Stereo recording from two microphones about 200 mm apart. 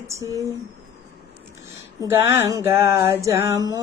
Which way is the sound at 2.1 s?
15° right (ahead or behind).